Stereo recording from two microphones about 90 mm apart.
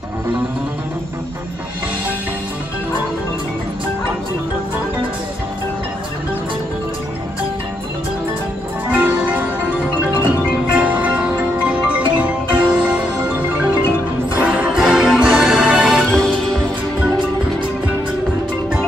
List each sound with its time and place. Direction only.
8.8 s music: 15° right (ahead or behind)
16.1 s music: 10° left (ahead or behind)